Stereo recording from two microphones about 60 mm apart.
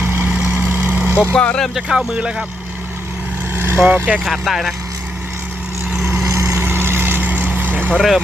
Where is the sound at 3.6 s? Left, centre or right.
Right.